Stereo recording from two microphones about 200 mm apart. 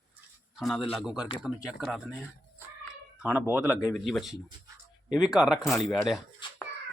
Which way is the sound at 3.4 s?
10° right (ahead or behind).